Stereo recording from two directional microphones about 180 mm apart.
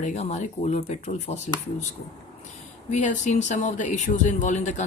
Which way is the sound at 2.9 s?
40° left (ahead or behind).